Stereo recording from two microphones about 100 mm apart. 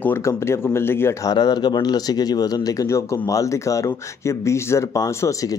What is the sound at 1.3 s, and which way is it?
Speech, 45° left (ahead or behind).